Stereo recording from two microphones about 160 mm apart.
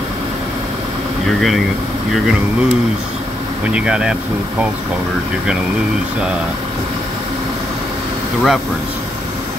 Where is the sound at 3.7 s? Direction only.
5° right (ahead or behind).